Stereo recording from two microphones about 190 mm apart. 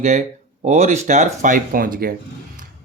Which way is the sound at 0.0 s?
35° right (ahead or behind).